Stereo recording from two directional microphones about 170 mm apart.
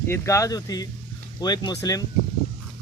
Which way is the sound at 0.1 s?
20° left (ahead or behind).